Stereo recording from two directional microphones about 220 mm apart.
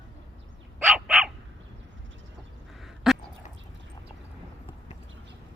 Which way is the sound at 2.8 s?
Centre (ahead or behind).